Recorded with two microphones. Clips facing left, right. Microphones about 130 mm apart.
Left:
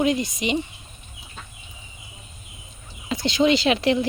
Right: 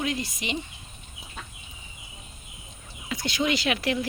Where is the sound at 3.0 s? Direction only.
25° left (ahead or behind).